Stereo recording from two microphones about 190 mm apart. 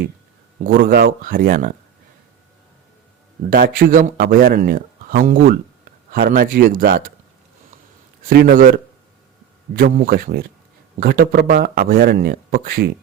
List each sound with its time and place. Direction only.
0.6 s a man's voice: 50° right (ahead or behind)
3.5 s a man's voice: 50° right (ahead or behind)
8.3 s a man's voice: 50° right (ahead or behind)
9.7 s a man's voice: 50° right (ahead or behind)